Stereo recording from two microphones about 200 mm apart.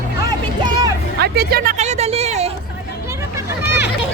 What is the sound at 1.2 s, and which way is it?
Speech, 50° right (ahead or behind).